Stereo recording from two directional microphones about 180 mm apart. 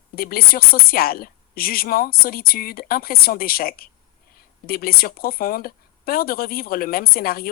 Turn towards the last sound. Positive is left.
turn(degrees=55)  # may be behind; listen again after turning